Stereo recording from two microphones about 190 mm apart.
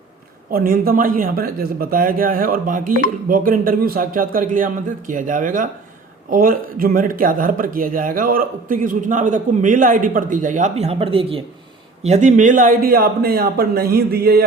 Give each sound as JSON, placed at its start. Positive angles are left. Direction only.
{"t": 0.5, "sound": "speech", "side_deg": -50}